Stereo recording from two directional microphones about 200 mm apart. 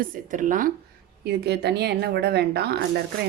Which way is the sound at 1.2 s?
55° right (ahead or behind).